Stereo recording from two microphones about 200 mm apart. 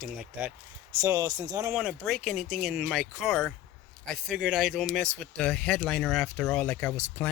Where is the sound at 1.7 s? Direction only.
5° right (ahead or behind).